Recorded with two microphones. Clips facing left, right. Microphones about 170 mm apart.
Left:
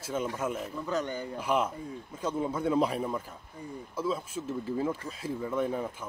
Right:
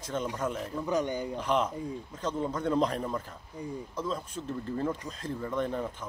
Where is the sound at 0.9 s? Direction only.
15° right (ahead or behind).